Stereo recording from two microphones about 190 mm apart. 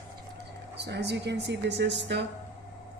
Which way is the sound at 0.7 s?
60° right (ahead or behind).